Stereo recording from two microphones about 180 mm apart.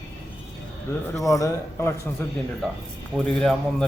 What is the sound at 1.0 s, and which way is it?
Speech, 20° left (ahead or behind).